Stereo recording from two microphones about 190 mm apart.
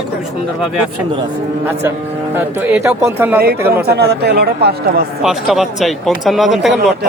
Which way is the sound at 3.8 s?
60° right (ahead or behind).